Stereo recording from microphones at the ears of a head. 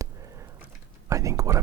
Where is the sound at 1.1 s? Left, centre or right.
Right.